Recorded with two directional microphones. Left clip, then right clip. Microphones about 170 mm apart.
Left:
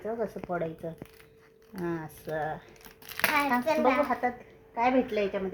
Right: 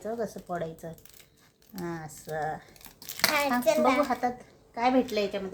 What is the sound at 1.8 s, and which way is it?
Speech, 20° left (ahead or behind).